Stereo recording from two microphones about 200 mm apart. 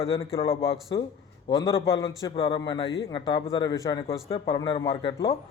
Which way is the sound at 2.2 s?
25° left (ahead or behind).